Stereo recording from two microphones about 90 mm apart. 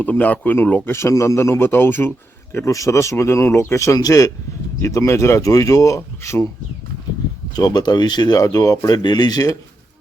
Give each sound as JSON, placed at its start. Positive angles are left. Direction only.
{"t": 0.0, "sound": "speech", "side_deg": 15}
{"t": 7.5, "sound": "speech", "side_deg": 50}
{"t": 8.5, "sound": "speech", "side_deg": 40}
{"t": 9.0, "sound": "speech", "side_deg": 55}